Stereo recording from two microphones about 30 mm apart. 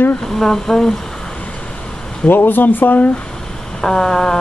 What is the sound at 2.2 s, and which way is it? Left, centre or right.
Speech, left.